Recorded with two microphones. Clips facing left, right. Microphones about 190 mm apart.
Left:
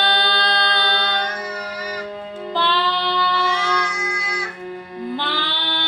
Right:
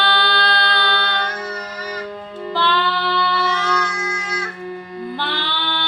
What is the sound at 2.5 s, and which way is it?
Child singing, 20° left (ahead or behind).